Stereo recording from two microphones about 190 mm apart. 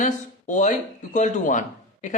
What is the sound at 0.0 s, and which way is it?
A man's voice, 40° left (ahead or behind).